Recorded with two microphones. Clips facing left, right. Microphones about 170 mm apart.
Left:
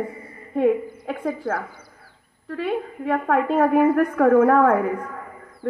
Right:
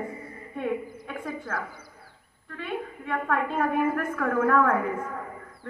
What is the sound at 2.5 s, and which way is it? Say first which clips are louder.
A woman's voice: left 8 dB; 30° left (ahead or behind).